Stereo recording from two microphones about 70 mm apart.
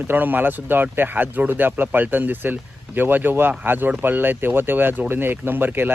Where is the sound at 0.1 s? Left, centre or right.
Right.